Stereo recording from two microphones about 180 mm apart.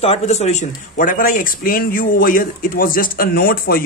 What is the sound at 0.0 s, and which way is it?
Speech, 35° left (ahead or behind).